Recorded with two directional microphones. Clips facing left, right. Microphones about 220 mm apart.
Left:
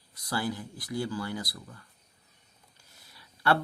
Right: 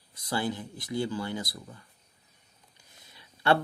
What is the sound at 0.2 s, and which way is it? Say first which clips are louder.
Speech: right 1 dB; 20° right (ahead or behind).